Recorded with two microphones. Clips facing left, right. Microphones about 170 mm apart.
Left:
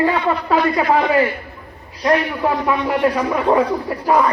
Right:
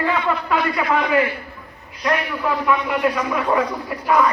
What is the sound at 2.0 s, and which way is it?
A man's voice, 35° left (ahead or behind).